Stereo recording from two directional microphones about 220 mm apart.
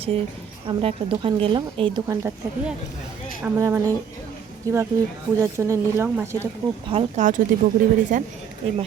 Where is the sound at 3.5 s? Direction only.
15° right (ahead or behind).